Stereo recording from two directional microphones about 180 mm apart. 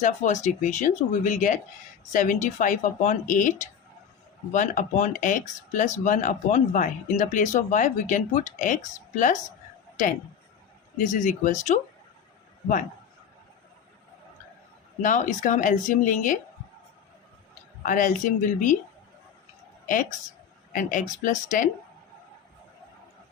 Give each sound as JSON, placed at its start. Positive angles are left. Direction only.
{"t": 0.0, "sound": "speech", "side_deg": 40}
{"t": 10.9, "sound": "speech", "side_deg": 45}
{"t": 15.0, "sound": "speech", "side_deg": 45}
{"t": 17.8, "sound": "speech", "side_deg": 45}
{"t": 19.9, "sound": "speech", "side_deg": 45}